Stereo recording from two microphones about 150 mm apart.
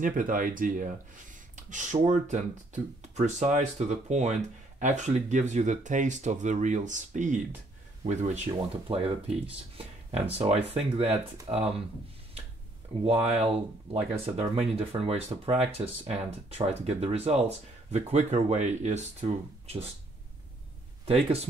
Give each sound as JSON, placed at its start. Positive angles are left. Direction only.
{"t": 0.0, "sound": "speech", "side_deg": -65}
{"t": 8.5, "sound": "speech", "side_deg": -35}
{"t": 13.0, "sound": "speech", "side_deg": -40}
{"t": 21.0, "sound": "speech", "side_deg": -40}